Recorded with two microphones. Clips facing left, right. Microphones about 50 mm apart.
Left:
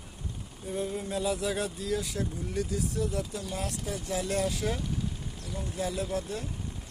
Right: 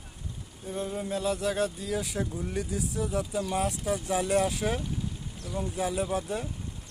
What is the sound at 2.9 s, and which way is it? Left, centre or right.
Speech, centre.